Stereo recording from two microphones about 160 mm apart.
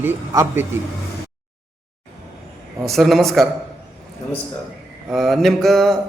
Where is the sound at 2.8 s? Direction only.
Centre (ahead or behind).